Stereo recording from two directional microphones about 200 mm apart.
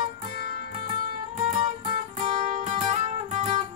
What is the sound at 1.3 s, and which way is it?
Music, 35° right (ahead or behind).